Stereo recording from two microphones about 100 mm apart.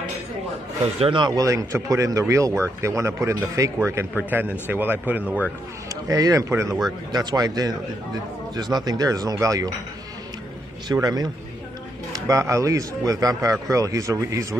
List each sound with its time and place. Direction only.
0.9 s a man's voice: 70° right (ahead or behind)
1.2 s a man's voice: 35° right (ahead or behind); by 5.2 s 15° right (ahead or behind)
6.0 s a man's voice: 35° right (ahead or behind)
7.1 s a man's voice: 40° right (ahead or behind)
10.9 s a man's voice: 40° right (ahead or behind)
12.3 s a man's voice: 30° right (ahead or behind)